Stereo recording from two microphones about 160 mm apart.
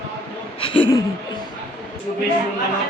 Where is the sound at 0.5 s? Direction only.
35° left (ahead or behind).